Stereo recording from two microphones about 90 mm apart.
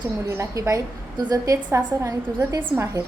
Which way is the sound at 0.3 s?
30° right (ahead or behind).